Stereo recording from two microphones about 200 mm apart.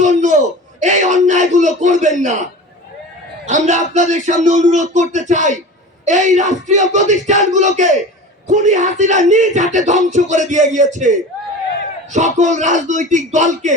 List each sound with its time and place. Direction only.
0.0 s a man's voice: 35° right (ahead or behind)
3.4 s speech: 35° right (ahead or behind)
12.1 s speech: 35° right (ahead or behind)